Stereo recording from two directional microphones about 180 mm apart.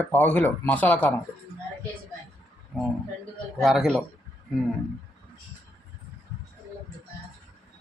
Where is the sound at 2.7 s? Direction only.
5° left (ahead or behind).